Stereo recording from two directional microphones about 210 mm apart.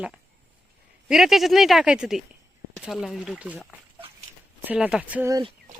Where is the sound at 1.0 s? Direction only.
Centre (ahead or behind).